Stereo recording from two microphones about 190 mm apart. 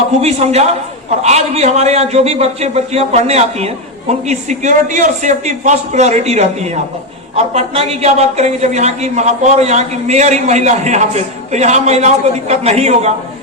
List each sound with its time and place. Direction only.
0.2 s a man's voice: 35° right (ahead or behind)